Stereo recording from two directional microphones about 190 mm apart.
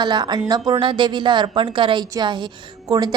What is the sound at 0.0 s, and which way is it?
A woman's voice, 20° right (ahead or behind).